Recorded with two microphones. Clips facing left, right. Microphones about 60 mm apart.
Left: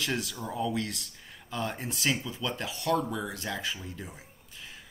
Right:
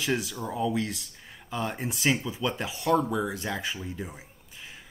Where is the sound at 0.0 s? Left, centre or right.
Centre.